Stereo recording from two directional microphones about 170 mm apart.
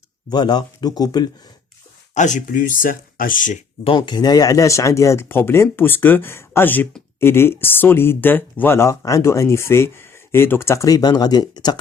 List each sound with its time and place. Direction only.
0.3 s speech: 25° left (ahead or behind)
2.1 s speech: 45° left (ahead or behind)
3.8 s speech: 30° left (ahead or behind)